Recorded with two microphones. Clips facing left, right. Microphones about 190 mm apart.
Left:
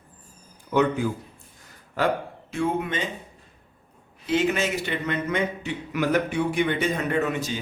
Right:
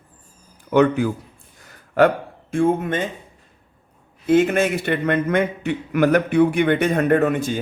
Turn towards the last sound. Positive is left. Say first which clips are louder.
# right 7 dB
turn(degrees=-50)  # may be behind; listen again after turning